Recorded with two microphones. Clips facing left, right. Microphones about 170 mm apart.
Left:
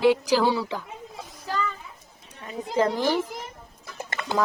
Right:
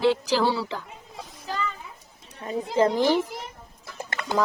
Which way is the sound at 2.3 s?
35° right (ahead or behind).